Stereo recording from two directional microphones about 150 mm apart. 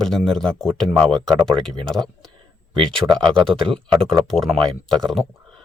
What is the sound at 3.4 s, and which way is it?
Speech, 35° right (ahead or behind).